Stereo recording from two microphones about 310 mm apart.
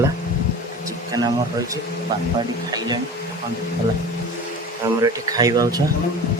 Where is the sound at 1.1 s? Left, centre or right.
Centre.